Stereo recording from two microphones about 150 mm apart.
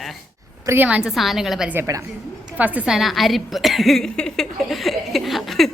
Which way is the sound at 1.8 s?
20° right (ahead or behind).